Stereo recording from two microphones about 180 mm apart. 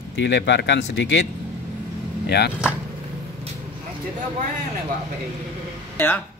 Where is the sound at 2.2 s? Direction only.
65° left (ahead or behind).